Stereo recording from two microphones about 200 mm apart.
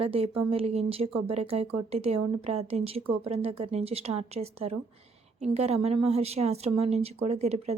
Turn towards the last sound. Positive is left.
turn(degrees=-30)  # may be behind; listen again after turning